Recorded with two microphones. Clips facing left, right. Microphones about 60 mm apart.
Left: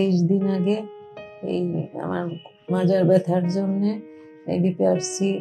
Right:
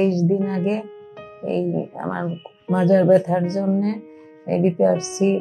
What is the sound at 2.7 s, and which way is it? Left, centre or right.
Speech, right.